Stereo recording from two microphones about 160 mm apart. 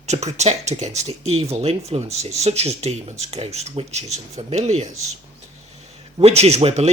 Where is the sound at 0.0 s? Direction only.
45° right (ahead or behind).